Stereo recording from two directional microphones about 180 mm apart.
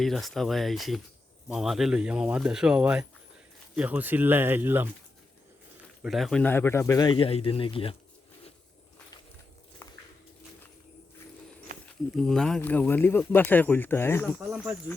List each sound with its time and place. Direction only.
0.0 s speech: centre (ahead or behind)
6.0 s speech: centre (ahead or behind); by 7.9 s 30° left (ahead or behind)
11.7 s a sound: 45° right (ahead or behind)
12.1 s speech: centre (ahead or behind)
14.3 s speech: 5° right (ahead or behind)